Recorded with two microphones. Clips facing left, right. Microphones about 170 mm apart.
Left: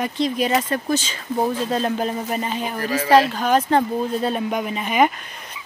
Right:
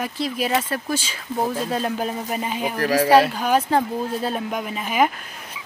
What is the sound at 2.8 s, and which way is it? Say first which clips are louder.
Speech: right 6 dB; 80° right.